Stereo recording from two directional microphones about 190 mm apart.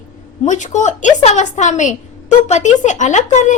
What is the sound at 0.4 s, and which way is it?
Speech, 40° left (ahead or behind).